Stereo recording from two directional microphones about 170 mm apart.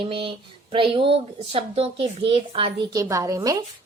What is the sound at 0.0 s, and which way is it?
A woman's voice, 30° right (ahead or behind).